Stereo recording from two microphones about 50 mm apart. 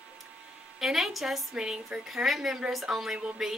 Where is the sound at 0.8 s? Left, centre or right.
Centre.